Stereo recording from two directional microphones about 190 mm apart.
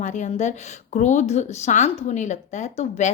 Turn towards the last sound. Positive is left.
turn(degrees=35)  # may be behind; listen again after turning